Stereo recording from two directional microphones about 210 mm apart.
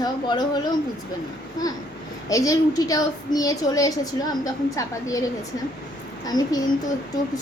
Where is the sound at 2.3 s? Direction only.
15° left (ahead or behind).